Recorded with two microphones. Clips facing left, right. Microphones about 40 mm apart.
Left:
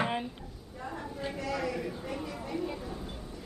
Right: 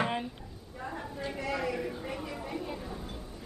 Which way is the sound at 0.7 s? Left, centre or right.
Centre.